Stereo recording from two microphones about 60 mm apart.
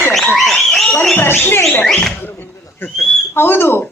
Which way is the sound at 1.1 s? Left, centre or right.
Left.